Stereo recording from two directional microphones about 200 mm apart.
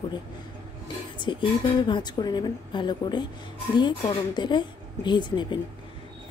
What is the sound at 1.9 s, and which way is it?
Speech, 20° left (ahead or behind).